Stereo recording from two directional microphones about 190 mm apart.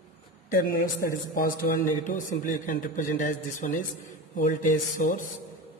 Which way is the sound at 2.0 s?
45° left (ahead or behind).